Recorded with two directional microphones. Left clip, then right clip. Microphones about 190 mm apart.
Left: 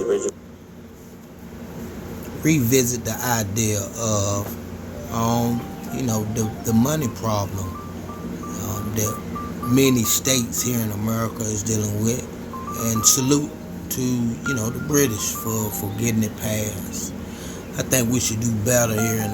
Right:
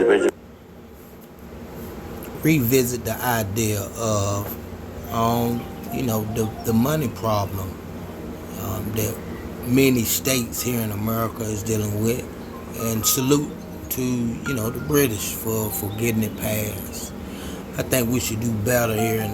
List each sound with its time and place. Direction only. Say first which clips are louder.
0.0 s a sound: right 5 dB; 45° right (ahead or behind)
2.4 s speech: even; centre (ahead or behind)
8.6 s music: even; centre (ahead or behind)
9.7 s speech: even; centre (ahead or behind)
17.7 s speech: left 1 dB; 5° left (ahead or behind)